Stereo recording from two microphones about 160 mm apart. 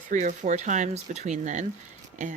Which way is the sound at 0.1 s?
50° right (ahead or behind).